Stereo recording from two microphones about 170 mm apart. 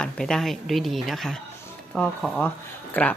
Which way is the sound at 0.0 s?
5° left (ahead or behind).